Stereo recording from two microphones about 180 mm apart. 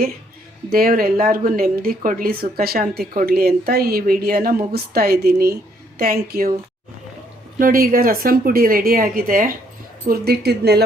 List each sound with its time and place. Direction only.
0.7 s a woman's voice: 55° right (ahead or behind)
7.6 s speech: 55° right (ahead or behind)
10.1 s a woman's voice: 60° right (ahead or behind)